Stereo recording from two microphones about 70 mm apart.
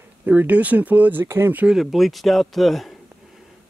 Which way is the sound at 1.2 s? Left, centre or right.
Right.